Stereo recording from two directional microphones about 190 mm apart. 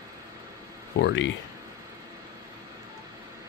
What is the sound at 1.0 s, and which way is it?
Speech, 70° left (ahead or behind).